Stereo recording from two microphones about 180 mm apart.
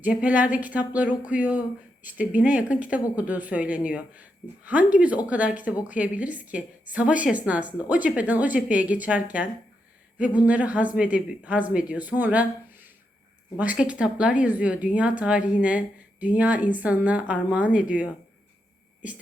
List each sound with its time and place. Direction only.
0.0 s a woman's voice: 10° right (ahead or behind)
13.6 s a woman's voice: 10° right (ahead or behind)